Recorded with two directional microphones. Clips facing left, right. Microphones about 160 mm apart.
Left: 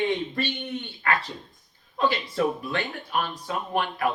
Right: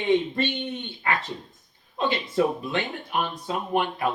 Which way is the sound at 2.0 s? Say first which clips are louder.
Right 1 dB; 20° right (ahead or behind).